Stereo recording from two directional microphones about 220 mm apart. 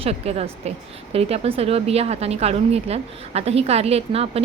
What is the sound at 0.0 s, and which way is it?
A woman's voice, 30° right (ahead or behind).